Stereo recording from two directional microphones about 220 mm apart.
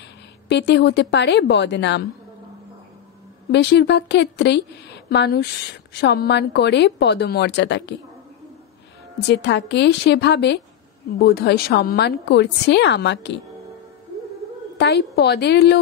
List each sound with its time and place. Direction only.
0.5 s a woman's voice: 50° left (ahead or behind)
3.5 s a woman's voice: 50° left (ahead or behind)
9.3 s a woman's voice: 50° left (ahead or behind)
14.8 s a woman's voice: 50° left (ahead or behind)